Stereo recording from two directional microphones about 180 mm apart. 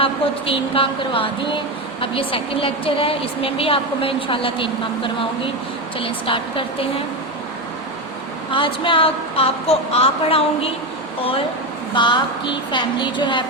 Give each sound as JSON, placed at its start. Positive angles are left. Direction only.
{"t": 0.0, "sound": "a woman's voice", "side_deg": 30}
{"t": 8.4, "sound": "speech", "side_deg": 30}
{"t": 11.9, "sound": "a woman's voice", "side_deg": 25}